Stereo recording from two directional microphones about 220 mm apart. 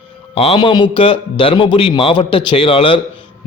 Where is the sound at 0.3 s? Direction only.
25° left (ahead or behind).